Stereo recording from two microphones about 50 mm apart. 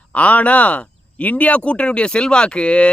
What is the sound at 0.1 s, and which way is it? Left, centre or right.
Speech, left.